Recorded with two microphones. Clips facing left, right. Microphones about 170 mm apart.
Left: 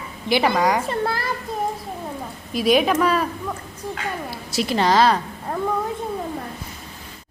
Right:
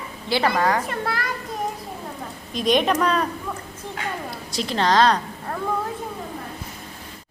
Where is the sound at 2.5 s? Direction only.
5° left (ahead or behind).